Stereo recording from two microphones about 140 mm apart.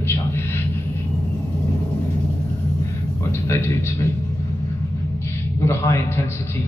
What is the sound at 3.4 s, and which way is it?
Speech, 20° left (ahead or behind).